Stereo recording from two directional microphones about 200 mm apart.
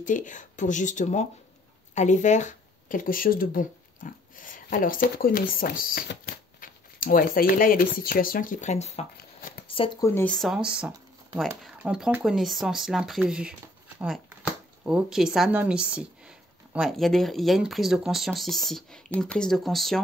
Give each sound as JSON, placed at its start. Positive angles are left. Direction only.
{"t": 0.0, "sound": "speech", "side_deg": 40}
{"t": 10.0, "sound": "speech", "side_deg": 10}
{"t": 10.3, "sound": "speech", "side_deg": 0}